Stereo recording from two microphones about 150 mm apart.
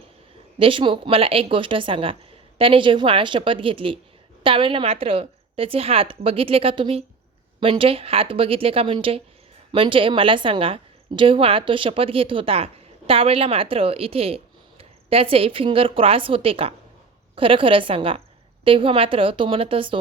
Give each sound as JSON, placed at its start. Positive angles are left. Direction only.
{"t": 0.6, "sound": "a woman's voice", "side_deg": -35}